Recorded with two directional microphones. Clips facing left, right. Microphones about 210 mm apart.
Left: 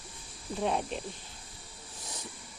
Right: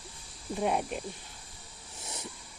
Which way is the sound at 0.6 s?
10° right (ahead or behind).